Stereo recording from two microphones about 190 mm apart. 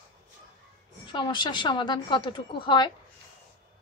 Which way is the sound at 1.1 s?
25° left (ahead or behind).